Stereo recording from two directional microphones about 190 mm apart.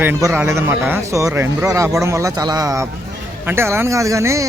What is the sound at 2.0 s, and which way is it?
Speech, 15° right (ahead or behind).